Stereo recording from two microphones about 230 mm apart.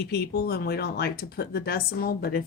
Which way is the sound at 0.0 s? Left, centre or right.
Left.